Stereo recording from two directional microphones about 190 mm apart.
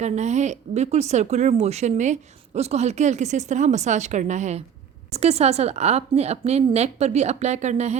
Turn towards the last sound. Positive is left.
turn(degrees=-35)  # may be behind; listen again after turning